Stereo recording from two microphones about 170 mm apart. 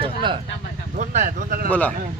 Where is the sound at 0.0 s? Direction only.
30° right (ahead or behind).